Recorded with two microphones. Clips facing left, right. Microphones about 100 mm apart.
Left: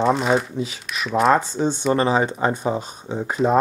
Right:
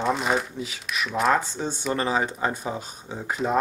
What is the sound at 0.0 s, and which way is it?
Speech, centre (ahead or behind).